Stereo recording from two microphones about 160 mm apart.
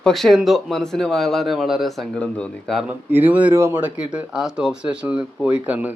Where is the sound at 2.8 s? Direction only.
10° right (ahead or behind).